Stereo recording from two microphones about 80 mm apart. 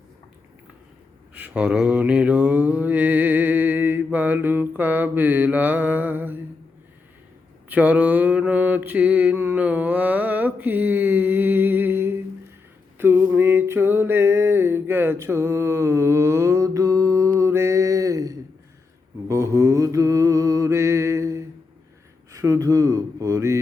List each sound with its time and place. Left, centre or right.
1.3 s mantra: centre
7.7 s mantra: right
13.0 s a sound: right
19.3 s mantra: right
22.3 s speech: right